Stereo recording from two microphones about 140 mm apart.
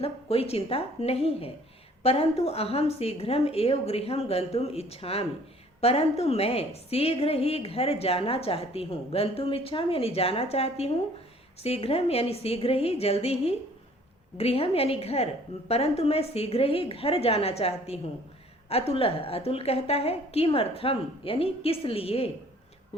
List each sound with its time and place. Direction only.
0.0 s a woman's voice: 45° left (ahead or behind)